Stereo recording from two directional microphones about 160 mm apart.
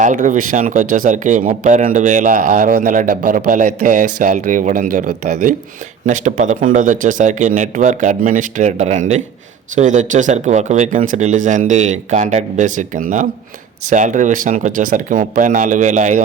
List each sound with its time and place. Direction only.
0.0 s speech: 50° right (ahead or behind)